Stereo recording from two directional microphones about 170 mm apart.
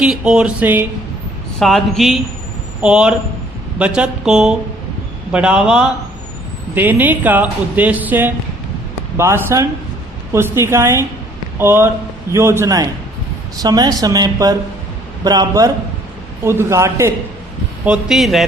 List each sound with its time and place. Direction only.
0.0 s speech: 5° right (ahead or behind)
1.5 s speech: centre (ahead or behind); by 17.2 s 15° right (ahead or behind)
17.8 s speech: 5° right (ahead or behind)